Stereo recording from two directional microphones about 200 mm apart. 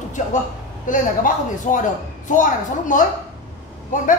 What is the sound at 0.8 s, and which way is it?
Speech, 40° left (ahead or behind).